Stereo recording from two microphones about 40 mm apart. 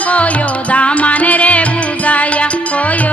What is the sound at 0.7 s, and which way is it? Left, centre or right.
Music, left.